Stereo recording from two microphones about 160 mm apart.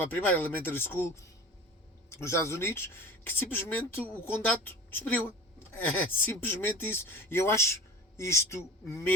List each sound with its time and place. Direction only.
0.0 s speech: 10° left (ahead or behind)